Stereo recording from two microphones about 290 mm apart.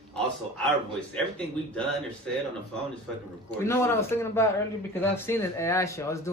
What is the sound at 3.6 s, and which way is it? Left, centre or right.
Speech, centre.